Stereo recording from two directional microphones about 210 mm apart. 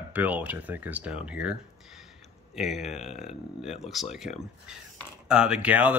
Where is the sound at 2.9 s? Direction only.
30° left (ahead or behind).